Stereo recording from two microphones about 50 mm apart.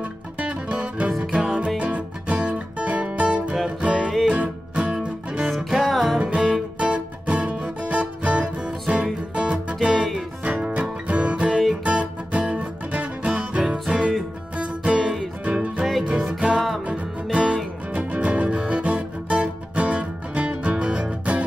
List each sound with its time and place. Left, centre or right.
0.4 s music: right
5.5 s music: centre
6.1 s music: centre
15.4 s music: right
15.8 s music: centre
16.1 s music: centre
16.8 s music: right